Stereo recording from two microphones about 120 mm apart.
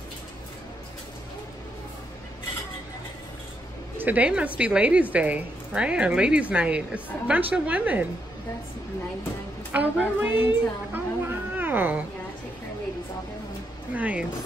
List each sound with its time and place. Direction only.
4.0 s a woman's voice: 15° right (ahead or behind)
9.7 s speech: 15° right (ahead or behind)
13.9 s a woman's voice: 10° right (ahead or behind)